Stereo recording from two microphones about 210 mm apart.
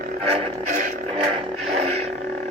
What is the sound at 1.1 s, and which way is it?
Music, 25° right (ahead or behind).